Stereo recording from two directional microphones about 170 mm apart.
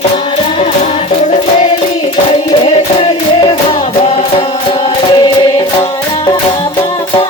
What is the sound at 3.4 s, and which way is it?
Music, 30° left (ahead or behind).